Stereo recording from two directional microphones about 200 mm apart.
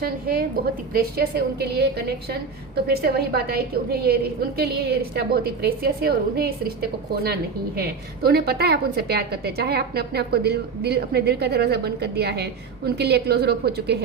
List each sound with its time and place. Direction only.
0.0 s a woman's voice: 50° right (ahead or behind)